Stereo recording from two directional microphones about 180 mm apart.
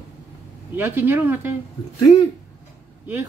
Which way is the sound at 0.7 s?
10° right (ahead or behind).